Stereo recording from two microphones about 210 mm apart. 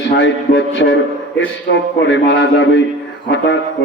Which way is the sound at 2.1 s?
60° left (ahead or behind).